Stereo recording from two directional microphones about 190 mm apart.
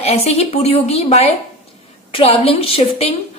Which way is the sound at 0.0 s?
35° left (ahead or behind).